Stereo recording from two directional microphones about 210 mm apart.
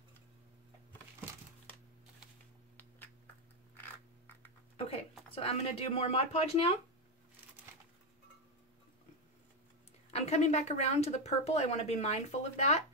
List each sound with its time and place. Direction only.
5.3 s speech: 30° left (ahead or behind)
10.1 s speech: 30° left (ahead or behind)